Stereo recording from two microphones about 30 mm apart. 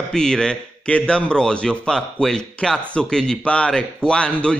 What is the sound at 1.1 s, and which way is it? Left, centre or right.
Speech, left.